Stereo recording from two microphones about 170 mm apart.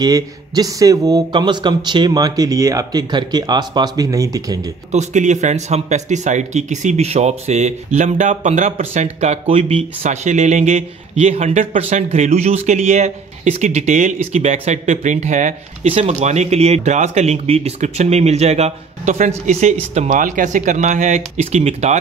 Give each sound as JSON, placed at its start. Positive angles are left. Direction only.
{"t": 0.0, "sound": "a man's voice", "side_deg": -20}
{"t": 4.9, "sound": "speech", "side_deg": -45}